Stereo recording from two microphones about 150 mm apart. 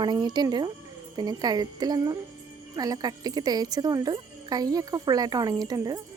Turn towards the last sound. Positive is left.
turn(degrees=-25)  # may be behind; listen again after turning